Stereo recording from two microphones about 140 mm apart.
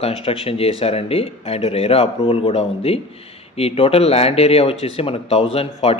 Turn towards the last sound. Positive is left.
turn(degrees=45)  # may be behind; listen again after turning